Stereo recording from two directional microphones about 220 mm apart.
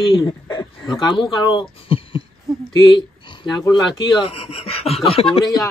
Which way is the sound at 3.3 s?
20° left (ahead or behind).